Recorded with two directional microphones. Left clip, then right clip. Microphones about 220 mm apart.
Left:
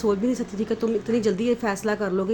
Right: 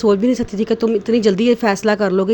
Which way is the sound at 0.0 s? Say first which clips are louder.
Right 8 dB; 35° right (ahead or behind).